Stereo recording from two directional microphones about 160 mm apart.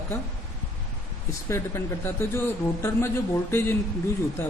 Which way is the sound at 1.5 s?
15° left (ahead or behind).